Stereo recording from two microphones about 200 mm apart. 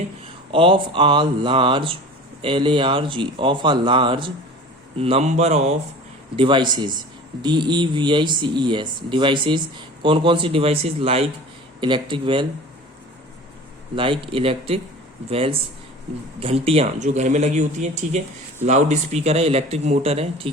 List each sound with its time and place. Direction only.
0.5 s speech: 25° right (ahead or behind)
13.9 s speech: 25° right (ahead or behind)